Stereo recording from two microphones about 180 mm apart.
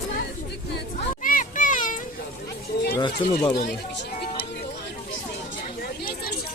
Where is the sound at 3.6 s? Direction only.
70° left (ahead or behind).